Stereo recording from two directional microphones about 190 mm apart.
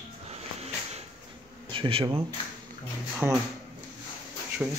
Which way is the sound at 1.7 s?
25° right (ahead or behind).